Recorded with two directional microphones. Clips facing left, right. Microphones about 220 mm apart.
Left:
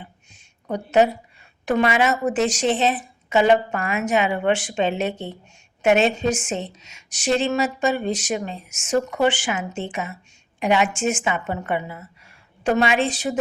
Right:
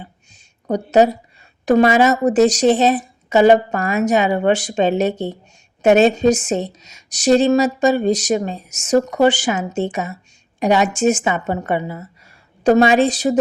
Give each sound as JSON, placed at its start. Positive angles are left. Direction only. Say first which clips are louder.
{"t": 0.7, "sound": "a woman's voice", "louder": "right 4 dB", "side_deg": -40}